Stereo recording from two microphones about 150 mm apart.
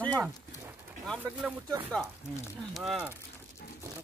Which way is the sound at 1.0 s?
5° left (ahead or behind).